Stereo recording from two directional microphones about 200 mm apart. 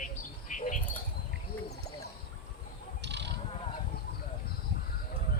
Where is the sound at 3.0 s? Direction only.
60° right (ahead or behind).